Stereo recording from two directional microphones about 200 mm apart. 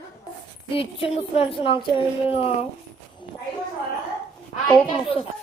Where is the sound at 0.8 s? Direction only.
25° left (ahead or behind).